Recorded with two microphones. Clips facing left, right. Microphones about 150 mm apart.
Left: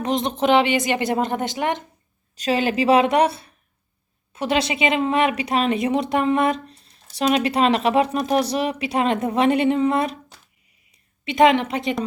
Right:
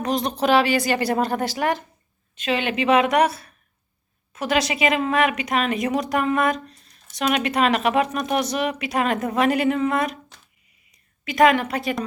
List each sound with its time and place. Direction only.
0.0 s speech: 25° left (ahead or behind)
2.3 s a woman's voice: 40° left (ahead or behind)
11.3 s speech: 25° left (ahead or behind)